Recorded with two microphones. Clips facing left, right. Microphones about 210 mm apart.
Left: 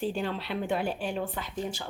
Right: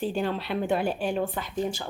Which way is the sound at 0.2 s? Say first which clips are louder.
Right 4 dB; 50° right (ahead or behind).